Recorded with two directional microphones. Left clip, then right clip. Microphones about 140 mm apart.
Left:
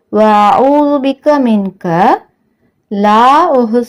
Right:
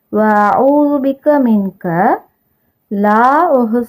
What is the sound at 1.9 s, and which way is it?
Speech, 30° left (ahead or behind).